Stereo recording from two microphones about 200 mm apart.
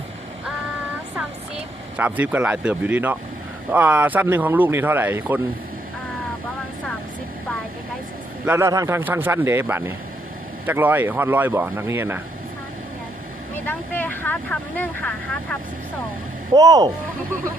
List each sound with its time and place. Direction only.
2.0 s speech: 10° right (ahead or behind)
8.4 s speech: 15° right (ahead or behind)
13.7 s speech: 10° left (ahead or behind)
16.6 s speech: 20° right (ahead or behind)